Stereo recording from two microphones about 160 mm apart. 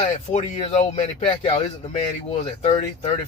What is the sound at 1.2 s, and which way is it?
Speech, 30° left (ahead or behind).